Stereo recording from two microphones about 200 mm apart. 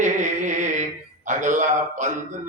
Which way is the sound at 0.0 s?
40° right (ahead or behind).